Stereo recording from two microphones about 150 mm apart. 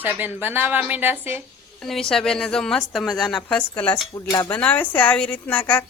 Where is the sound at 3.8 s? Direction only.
25° left (ahead or behind).